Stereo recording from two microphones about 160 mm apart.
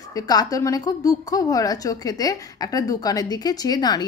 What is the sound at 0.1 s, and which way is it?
A woman's voice, 20° left (ahead or behind).